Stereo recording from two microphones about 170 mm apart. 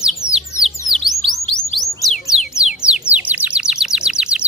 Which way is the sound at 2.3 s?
5° right (ahead or behind).